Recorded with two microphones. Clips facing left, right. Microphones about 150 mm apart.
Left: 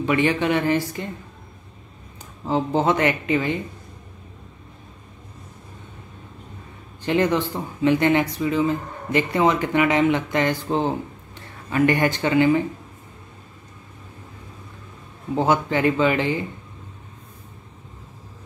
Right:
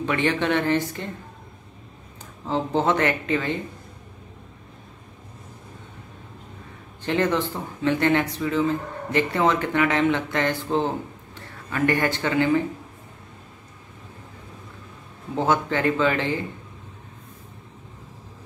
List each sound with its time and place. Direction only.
0.0 s speech: 10° left (ahead or behind)
2.4 s speech: 10° left (ahead or behind)
7.0 s speech: 15° left (ahead or behind)
15.3 s speech: 15° left (ahead or behind)